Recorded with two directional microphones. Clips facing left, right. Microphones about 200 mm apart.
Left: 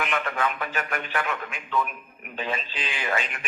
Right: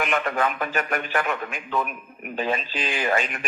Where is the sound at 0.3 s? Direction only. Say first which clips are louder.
Right 3 dB; 40° right (ahead or behind).